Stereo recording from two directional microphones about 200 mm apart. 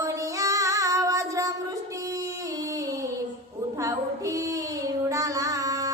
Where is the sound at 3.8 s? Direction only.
15° right (ahead or behind).